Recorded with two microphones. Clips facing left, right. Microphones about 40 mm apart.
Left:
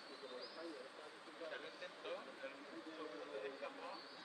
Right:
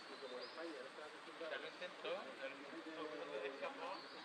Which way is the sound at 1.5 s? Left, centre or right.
Right.